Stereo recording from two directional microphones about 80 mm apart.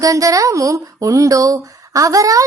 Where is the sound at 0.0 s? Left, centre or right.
Right.